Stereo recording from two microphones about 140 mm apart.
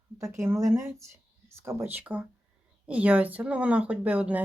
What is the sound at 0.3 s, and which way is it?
Speech, 20° right (ahead or behind).